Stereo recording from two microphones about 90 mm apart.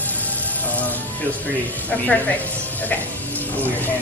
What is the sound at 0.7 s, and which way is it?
A woman's voice, 20° left (ahead or behind).